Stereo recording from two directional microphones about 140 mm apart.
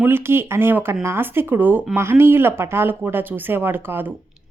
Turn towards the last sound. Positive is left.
turn(degrees=-15)  # may be behind; listen again after turning